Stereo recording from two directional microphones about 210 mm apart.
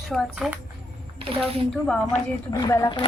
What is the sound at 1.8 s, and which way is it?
Speech, 5° left (ahead or behind).